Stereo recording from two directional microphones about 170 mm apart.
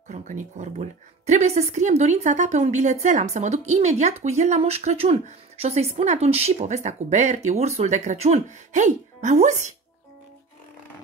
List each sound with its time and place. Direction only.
0.1 s a woman's voice: 45° right (ahead or behind)